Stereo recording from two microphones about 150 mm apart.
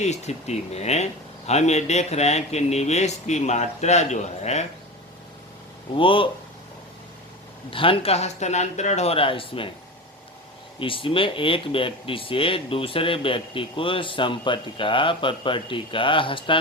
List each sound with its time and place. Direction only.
0.0 s speech: 50° left (ahead or behind)
6.0 s speech: 35° left (ahead or behind)
7.7 s speech: 35° left (ahead or behind)
10.8 s speech: 35° left (ahead or behind)